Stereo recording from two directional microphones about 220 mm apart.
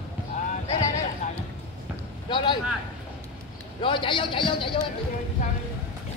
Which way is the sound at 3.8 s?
20° left (ahead or behind).